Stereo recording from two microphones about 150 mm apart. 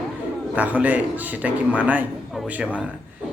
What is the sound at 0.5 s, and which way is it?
A man's voice, 10° right (ahead or behind).